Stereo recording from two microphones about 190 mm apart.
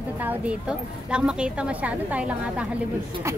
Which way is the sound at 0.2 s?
5° right (ahead or behind).